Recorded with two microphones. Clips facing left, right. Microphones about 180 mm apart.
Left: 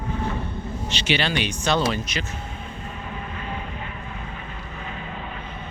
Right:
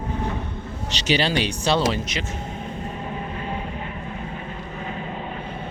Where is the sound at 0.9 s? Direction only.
40° right (ahead or behind).